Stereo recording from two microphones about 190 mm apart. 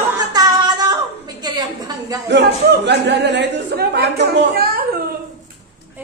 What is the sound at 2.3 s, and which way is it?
Speech, 65° right (ahead or behind).